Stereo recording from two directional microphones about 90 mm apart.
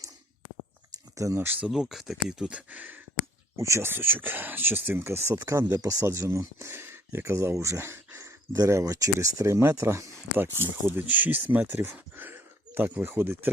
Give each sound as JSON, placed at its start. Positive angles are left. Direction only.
{"t": 1.1, "sound": "speech", "side_deg": -35}
{"t": 1.5, "sound": "speech", "side_deg": -15}
{"t": 1.7, "sound": "speech", "side_deg": -5}
{"t": 2.4, "sound": "speech", "side_deg": -15}
{"t": 3.6, "sound": "speech", "side_deg": -30}